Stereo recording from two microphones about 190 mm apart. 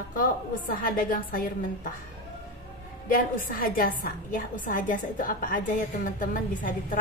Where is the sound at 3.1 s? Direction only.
50° left (ahead or behind).